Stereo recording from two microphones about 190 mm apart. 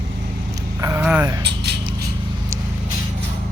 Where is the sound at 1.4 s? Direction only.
65° right (ahead or behind).